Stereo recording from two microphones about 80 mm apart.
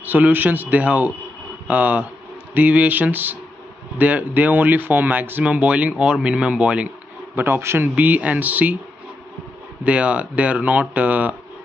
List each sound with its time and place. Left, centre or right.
0.0 s speech: right
7.3 s speech: right
7.9 s speech: centre
9.8 s speech: centre